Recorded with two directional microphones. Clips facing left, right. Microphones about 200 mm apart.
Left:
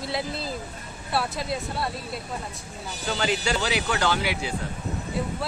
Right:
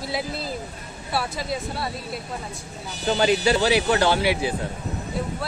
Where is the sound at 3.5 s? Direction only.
35° right (ahead or behind).